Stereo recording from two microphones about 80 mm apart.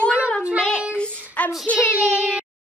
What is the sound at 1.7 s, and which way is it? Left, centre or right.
Child singing, centre.